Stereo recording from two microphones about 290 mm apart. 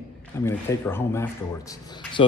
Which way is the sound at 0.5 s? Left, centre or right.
Centre.